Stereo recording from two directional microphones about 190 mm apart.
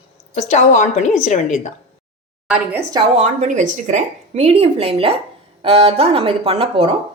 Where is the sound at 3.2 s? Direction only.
40° right (ahead or behind).